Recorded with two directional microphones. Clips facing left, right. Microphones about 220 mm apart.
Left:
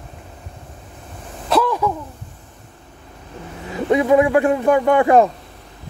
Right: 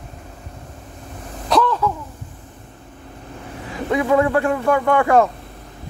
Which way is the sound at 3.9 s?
20° left (ahead or behind).